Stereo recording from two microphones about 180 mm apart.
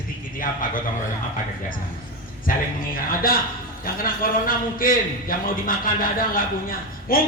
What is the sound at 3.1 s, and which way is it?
A man's voice, 55° left (ahead or behind).